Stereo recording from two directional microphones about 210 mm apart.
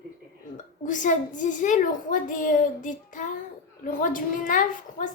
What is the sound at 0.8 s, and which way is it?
A woman's voice, 35° left (ahead or behind).